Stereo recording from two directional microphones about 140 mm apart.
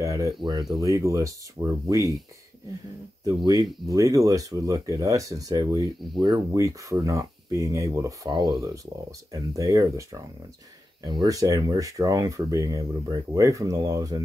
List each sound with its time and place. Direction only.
0.0 s a sound: 25° right (ahead or behind)
0.4 s speech: 30° right (ahead or behind)
3.3 s speech: 30° right (ahead or behind)
6.5 s speech: 20° right (ahead or behind)